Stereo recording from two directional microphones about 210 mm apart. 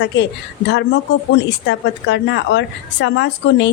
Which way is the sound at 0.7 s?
55° left (ahead or behind).